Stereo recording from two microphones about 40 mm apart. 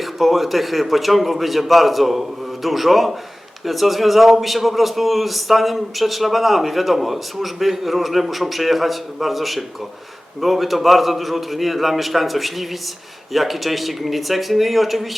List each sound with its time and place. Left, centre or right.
0.0 s a man's voice: centre